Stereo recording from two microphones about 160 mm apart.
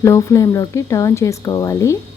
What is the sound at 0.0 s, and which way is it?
Speech, 20° left (ahead or behind).